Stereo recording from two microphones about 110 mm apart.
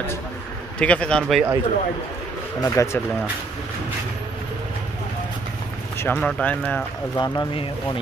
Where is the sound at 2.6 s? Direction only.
30° left (ahead or behind).